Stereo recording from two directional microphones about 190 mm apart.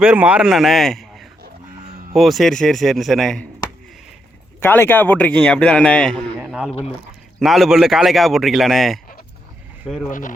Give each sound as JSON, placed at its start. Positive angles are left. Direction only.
{"t": 0.0, "sound": "speech", "side_deg": -5}
{"t": 4.6, "sound": "speech", "side_deg": 10}
{"t": 10.1, "sound": "speech", "side_deg": 45}